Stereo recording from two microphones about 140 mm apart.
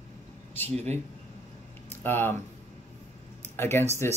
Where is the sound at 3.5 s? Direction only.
15° left (ahead or behind).